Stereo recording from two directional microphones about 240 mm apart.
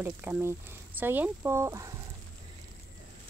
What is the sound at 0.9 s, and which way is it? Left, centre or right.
Speech, centre.